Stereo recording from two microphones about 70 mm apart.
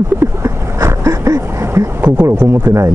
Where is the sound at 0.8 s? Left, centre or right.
Right.